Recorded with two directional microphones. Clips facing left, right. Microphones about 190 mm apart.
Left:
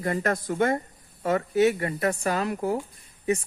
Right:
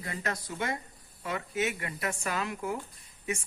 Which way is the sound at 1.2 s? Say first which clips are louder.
Left 11 dB; 40° left (ahead or behind).